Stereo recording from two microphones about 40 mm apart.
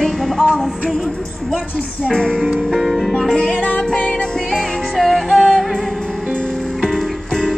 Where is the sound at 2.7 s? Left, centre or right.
Centre.